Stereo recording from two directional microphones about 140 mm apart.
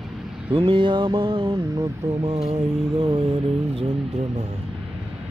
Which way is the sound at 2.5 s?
40° right (ahead or behind).